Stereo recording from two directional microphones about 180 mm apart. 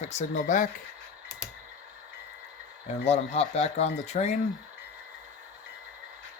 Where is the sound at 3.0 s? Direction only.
35° left (ahead or behind).